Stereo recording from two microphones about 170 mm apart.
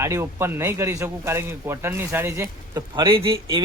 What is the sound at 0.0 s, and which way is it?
A man's voice, 15° right (ahead or behind).